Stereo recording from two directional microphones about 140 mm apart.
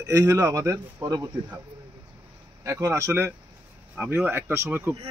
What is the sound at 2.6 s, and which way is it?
Speech, 20° right (ahead or behind).